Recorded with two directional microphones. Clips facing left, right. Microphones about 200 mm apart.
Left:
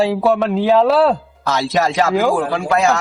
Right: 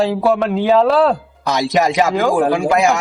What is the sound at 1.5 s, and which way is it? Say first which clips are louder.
A man's voice: right 2 dB; 15° right (ahead or behind).